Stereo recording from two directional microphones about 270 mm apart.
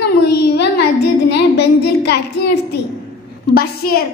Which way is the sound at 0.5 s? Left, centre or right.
Left.